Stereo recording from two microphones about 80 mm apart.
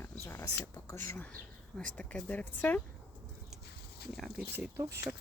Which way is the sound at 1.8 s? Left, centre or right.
Centre.